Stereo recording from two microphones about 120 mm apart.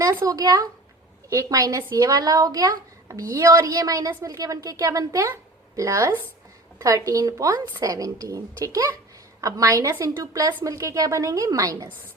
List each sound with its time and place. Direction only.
0.0 s speech: 30° right (ahead or behind)